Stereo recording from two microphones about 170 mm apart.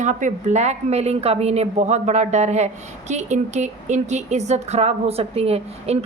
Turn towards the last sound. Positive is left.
turn(degrees=-35)  # may be behind; listen again after turning